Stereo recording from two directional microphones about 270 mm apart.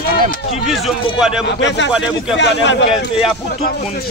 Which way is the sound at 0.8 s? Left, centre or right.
Centre.